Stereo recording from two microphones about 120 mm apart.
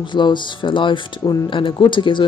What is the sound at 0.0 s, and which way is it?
Speech, 40° left (ahead or behind).